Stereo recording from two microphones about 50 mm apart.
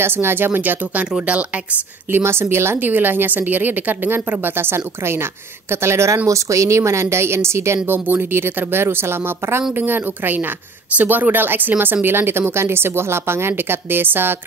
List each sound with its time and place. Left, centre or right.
0.0 s a woman's voice: right
2.2 s speech: right
2.9 s speech: right
6.3 s speech: right
11.0 s speech: right